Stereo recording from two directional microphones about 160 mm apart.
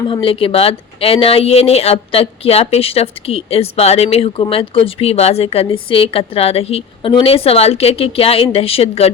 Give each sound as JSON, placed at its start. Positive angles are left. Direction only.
{"t": 0.1, "sound": "speech", "side_deg": 35}